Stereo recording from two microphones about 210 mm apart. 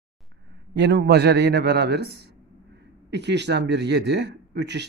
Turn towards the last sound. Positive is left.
turn(degrees=-55)  # may be behind; listen again after turning